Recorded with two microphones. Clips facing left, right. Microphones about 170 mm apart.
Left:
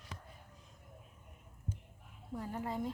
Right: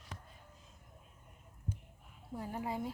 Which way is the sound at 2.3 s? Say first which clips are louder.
Even; 10° right (ahead or behind).